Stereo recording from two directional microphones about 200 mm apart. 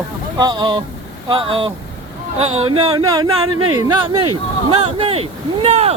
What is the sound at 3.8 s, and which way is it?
Speech, 25° right (ahead or behind).